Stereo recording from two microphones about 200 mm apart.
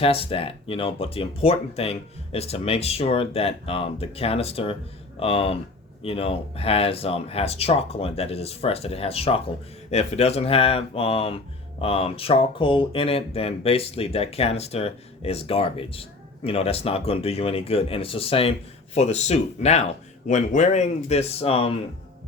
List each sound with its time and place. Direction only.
0.0 s speech: 30° left (ahead or behind)